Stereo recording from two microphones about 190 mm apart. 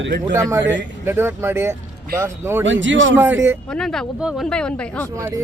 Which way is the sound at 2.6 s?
80° right.